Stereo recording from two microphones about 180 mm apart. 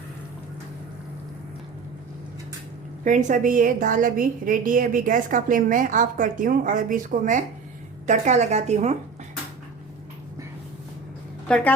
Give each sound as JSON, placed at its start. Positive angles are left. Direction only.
{"t": 3.0, "sound": "a woman's voice", "side_deg": -45}
{"t": 11.4, "sound": "speech", "side_deg": 5}